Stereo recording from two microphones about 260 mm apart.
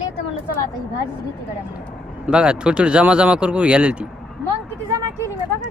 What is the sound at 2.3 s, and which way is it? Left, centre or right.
Speech, centre.